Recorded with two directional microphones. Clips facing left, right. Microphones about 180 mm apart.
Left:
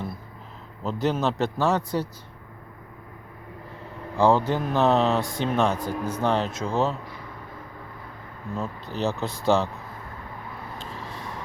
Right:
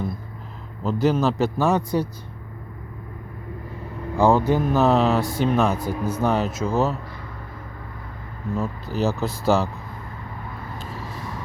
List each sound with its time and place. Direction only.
0.8 s speech: centre (ahead or behind)
4.2 s speech: 10° right (ahead or behind)
8.5 s speech: 5° right (ahead or behind)
10.8 s vehicle: 5° right (ahead or behind)